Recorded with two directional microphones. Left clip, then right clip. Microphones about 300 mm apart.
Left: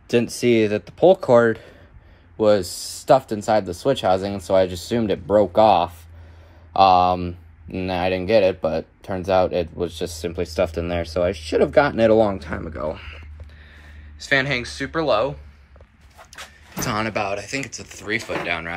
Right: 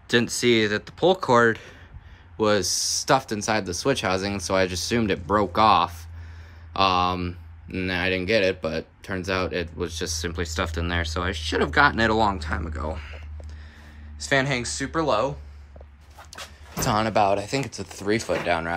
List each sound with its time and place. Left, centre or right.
0.1 s speech: centre
14.2 s speech: centre
16.8 s speech: centre